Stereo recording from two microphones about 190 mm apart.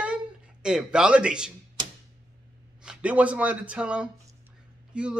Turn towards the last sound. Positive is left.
turn(degrees=-5)  # may be behind; listen again after turning